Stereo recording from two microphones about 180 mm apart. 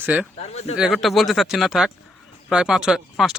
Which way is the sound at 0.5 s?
35° left (ahead or behind).